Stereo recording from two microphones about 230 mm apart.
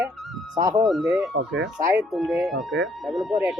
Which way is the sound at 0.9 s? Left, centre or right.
Centre.